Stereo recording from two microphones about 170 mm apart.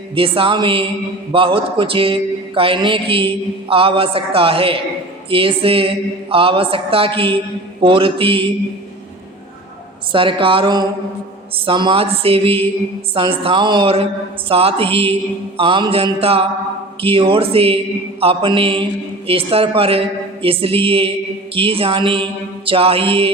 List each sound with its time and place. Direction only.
0.1 s a man's voice: 30° right (ahead or behind)
10.1 s a man's voice: 30° right (ahead or behind)